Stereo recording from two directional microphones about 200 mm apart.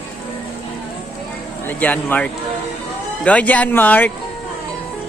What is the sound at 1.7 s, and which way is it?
Speech, 10° left (ahead or behind).